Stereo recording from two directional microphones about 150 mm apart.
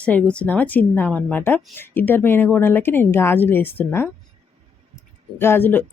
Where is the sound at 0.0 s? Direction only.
10° left (ahead or behind).